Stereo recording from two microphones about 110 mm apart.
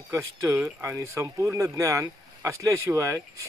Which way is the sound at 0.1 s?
25° right (ahead or behind).